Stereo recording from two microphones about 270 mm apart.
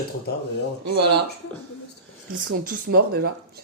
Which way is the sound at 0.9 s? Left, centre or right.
Right.